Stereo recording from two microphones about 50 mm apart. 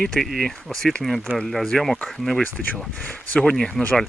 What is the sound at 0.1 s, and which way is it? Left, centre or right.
Speech, centre.